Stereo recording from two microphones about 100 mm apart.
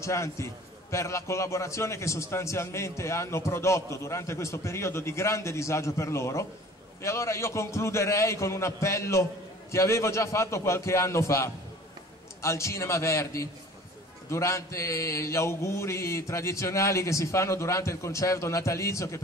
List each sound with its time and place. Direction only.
0.0 s a man's voice: 30° left (ahead or behind)